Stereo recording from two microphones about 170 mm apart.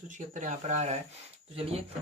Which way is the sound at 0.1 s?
45° right (ahead or behind).